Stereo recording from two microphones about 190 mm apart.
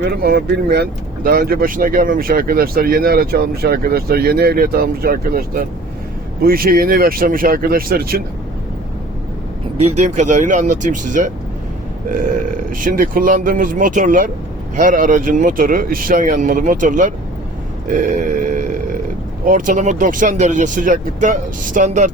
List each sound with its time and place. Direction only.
0.2 s speech: 55° right (ahead or behind)
10.0 s speech: 40° right (ahead or behind)
12.7 s speech: 45° right (ahead or behind)
17.9 s a sound: 45° right (ahead or behind)
19.5 s speech: 45° right (ahead or behind)